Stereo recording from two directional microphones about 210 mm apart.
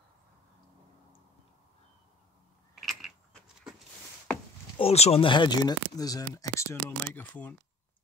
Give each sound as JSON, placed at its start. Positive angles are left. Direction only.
{"t": 2.7, "sound": "mechanisms", "side_deg": 0}
{"t": 4.7, "sound": "speech", "side_deg": 30}